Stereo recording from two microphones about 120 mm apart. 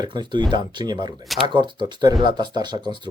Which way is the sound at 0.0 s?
40° right (ahead or behind).